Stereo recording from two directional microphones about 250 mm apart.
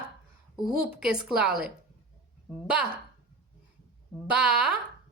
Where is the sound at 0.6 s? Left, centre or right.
Centre.